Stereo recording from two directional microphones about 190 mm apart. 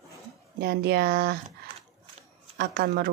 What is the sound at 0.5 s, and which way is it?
Speech, 60° right (ahead or behind).